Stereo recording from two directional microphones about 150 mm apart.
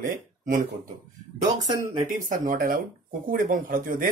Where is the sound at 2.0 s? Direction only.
65° right (ahead or behind).